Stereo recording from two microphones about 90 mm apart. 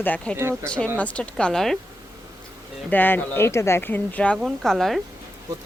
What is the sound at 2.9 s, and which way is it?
Speech, 20° left (ahead or behind).